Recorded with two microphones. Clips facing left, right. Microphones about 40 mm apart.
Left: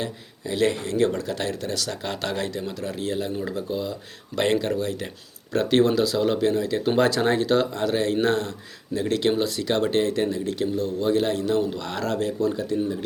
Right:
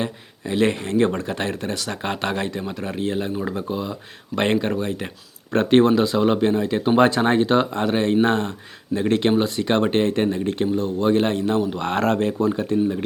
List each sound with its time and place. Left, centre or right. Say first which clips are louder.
0.0 s speech: right 3 dB; right
11.8 s speech: right 6 dB; right